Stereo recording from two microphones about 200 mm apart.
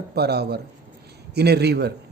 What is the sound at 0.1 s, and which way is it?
Speech, 55° right (ahead or behind).